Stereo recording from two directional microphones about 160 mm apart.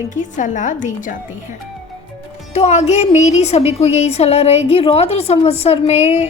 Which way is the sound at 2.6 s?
40° left (ahead or behind).